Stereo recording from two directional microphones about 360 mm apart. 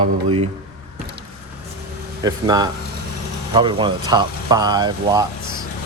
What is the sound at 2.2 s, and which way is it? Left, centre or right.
Speech, centre.